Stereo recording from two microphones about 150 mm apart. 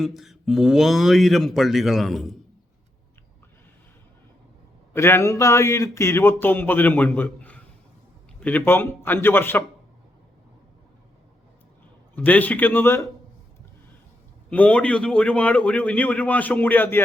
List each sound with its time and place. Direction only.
0.0 s speech: centre (ahead or behind)
4.9 s speech: 20° left (ahead or behind)
12.1 s speech: 10° left (ahead or behind)
14.5 s speech: 10° left (ahead or behind)